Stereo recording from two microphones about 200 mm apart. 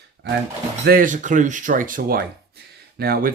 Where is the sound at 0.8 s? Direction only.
45° right (ahead or behind).